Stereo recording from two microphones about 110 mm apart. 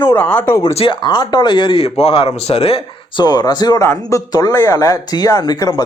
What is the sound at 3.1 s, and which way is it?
Speech, 40° left (ahead or behind).